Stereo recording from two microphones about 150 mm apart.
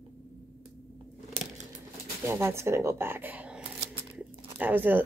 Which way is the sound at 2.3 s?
20° right (ahead or behind).